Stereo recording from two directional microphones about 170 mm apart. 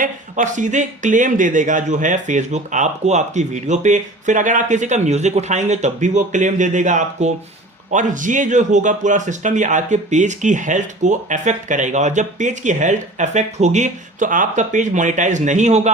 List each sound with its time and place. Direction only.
0.0 s a man's voice: 50° right (ahead or behind)